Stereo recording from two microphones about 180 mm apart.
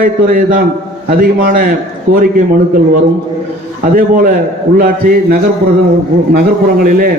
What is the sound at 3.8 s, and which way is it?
A man's voice, 50° right (ahead or behind).